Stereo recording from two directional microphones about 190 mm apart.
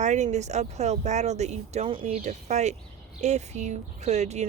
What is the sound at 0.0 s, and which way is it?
Speech, 40° right (ahead or behind).